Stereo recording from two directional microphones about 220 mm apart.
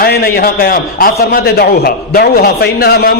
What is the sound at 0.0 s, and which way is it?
A man's voice, 45° left (ahead or behind).